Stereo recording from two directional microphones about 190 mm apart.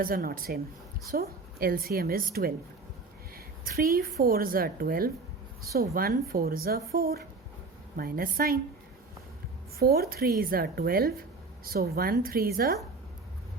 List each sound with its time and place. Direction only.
0.0 s a woman's voice: 50° right (ahead or behind)
9.7 s a woman's voice: 55° right (ahead or behind)